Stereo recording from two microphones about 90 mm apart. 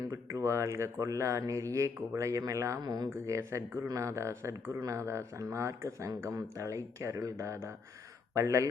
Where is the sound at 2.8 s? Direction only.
50° right (ahead or behind).